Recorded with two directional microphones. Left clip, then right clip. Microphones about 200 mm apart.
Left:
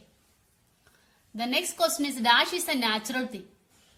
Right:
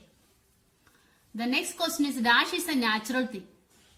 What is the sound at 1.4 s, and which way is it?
A woman's voice, 30° left (ahead or behind).